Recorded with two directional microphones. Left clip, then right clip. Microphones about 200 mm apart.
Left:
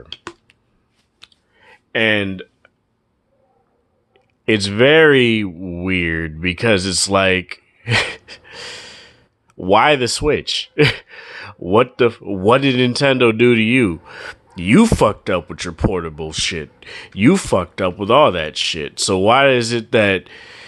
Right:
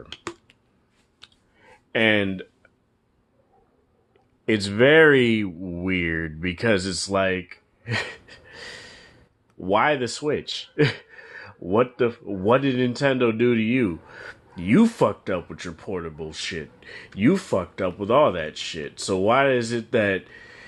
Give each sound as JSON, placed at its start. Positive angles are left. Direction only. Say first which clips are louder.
{"t": 1.2, "sound": "clicking", "louder": "left 5 dB", "side_deg": 15}
{"t": 4.1, "sound": "speech", "louder": "left 7 dB", "side_deg": 25}